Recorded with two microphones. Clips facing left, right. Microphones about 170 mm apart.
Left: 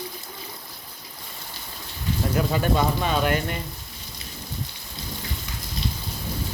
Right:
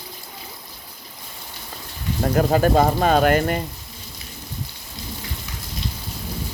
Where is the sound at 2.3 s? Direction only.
50° right (ahead or behind).